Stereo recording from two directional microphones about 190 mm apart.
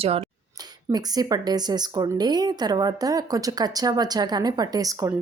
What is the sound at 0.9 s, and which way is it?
Speech, 20° right (ahead or behind).